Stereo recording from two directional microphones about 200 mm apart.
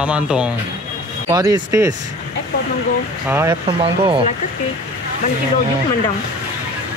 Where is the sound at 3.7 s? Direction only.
25° right (ahead or behind).